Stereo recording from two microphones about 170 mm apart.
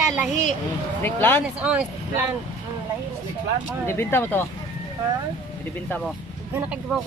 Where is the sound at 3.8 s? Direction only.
15° left (ahead or behind).